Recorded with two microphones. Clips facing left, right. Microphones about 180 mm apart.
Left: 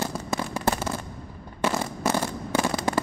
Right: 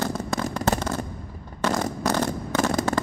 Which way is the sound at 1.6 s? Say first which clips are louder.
Right 1 dB; 10° left (ahead or behind).